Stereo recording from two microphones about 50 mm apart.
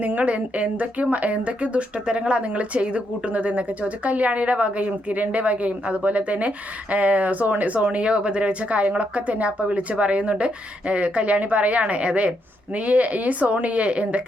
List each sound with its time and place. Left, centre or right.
0.0 s speech: right